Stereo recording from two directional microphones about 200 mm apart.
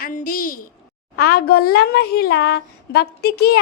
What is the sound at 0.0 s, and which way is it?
Speech, 40° left (ahead or behind).